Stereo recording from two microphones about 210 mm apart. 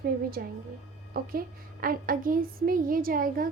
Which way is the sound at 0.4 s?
45° right (ahead or behind).